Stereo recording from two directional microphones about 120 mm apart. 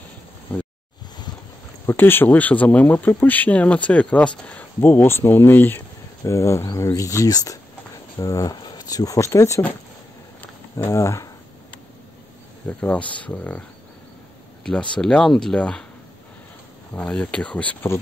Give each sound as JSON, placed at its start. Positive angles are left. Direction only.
{"t": 0.5, "sound": "speech", "side_deg": 10}
{"t": 1.9, "sound": "speech", "side_deg": 15}
{"t": 10.9, "sound": "speech", "side_deg": 25}
{"t": 12.6, "sound": "speech", "side_deg": 10}
{"t": 14.6, "sound": "speech", "side_deg": 10}
{"t": 16.9, "sound": "speech", "side_deg": 10}